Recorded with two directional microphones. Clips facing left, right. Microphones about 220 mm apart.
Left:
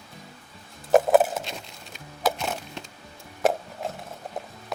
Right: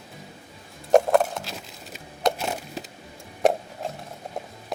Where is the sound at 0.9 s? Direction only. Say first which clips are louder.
Even; 5° left (ahead or behind).